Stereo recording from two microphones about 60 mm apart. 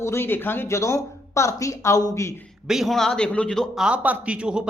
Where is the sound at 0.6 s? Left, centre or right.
Left.